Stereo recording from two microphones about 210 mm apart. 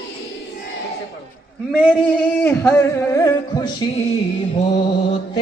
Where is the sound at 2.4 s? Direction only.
10° left (ahead or behind).